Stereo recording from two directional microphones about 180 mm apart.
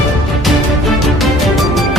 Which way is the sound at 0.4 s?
Centre (ahead or behind).